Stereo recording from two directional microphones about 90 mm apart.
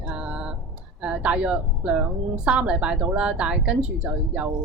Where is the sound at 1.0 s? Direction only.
10° right (ahead or behind).